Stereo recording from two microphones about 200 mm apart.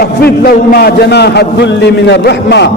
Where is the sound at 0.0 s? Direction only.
50° left (ahead or behind).